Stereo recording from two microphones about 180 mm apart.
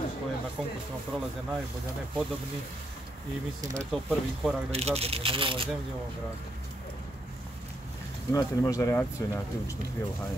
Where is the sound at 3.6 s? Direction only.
40° right (ahead or behind).